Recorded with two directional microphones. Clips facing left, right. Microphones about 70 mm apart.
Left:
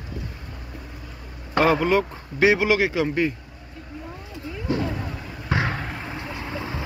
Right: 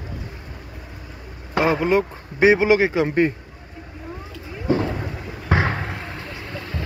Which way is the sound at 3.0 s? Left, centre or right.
Right.